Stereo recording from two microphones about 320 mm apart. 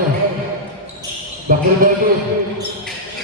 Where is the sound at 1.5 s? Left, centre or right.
Right.